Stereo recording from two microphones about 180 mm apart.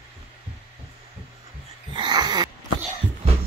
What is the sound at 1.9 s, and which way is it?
Wheeze, 25° right (ahead or behind).